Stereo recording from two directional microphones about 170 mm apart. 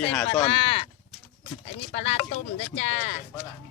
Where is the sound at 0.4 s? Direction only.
35° left (ahead or behind).